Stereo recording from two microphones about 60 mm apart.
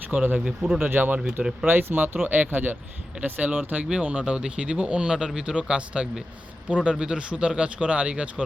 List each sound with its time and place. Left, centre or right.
0.1 s speech: right
0.4 s speech: centre
0.8 s speech: right